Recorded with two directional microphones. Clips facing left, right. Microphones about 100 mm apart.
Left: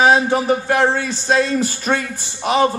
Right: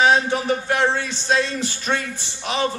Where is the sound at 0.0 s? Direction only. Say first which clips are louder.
Left 3 dB; 45° left (ahead or behind).